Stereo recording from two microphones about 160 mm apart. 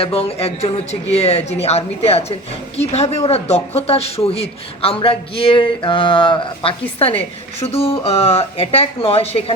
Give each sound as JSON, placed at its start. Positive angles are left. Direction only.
{"t": 0.0, "sound": "speech", "side_deg": 40}